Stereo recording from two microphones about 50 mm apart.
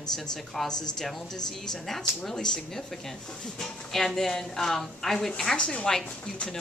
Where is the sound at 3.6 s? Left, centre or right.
Centre.